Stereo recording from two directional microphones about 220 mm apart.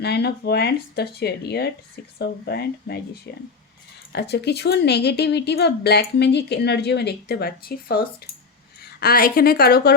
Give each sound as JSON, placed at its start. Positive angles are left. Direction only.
{"t": 0.0, "sound": "speech", "side_deg": 50}